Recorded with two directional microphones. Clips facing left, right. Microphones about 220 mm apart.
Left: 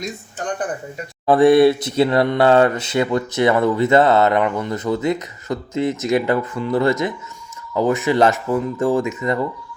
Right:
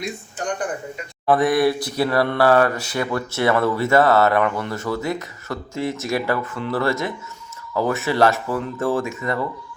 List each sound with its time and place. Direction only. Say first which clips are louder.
1.3 s speech: left 6 dB; 25° left (ahead or behind)